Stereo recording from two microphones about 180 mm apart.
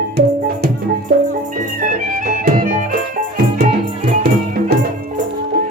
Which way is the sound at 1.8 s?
50° right (ahead or behind).